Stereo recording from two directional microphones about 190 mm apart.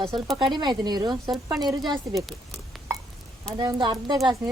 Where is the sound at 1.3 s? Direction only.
Centre (ahead or behind).